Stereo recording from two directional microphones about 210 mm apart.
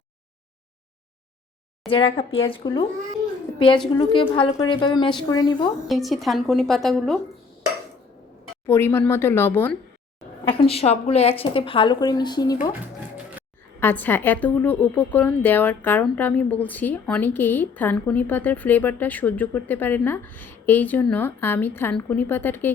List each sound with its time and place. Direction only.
1.9 s a woman's voice: 25° left (ahead or behind)
5.9 s a woman's voice: centre (ahead or behind)
8.6 s a woman's voice: 10° left (ahead or behind)
10.4 s a woman's voice: 25° left (ahead or behind)
13.7 s a woman's voice: 10° left (ahead or behind)